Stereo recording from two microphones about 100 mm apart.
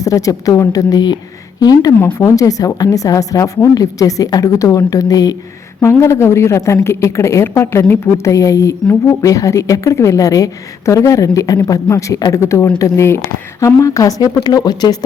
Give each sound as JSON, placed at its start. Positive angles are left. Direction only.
{"t": 0.0, "sound": "a woman's voice", "side_deg": 35}
{"t": 5.8, "sound": "a woman's voice", "side_deg": 25}